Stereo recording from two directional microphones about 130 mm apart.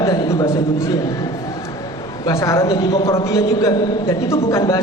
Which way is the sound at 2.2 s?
25° left (ahead or behind).